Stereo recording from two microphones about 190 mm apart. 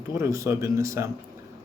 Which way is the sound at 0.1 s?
15° right (ahead or behind).